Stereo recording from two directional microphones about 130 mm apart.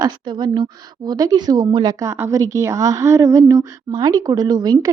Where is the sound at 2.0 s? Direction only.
25° right (ahead or behind).